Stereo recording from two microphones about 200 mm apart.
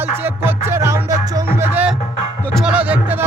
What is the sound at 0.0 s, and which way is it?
Music, 10° right (ahead or behind).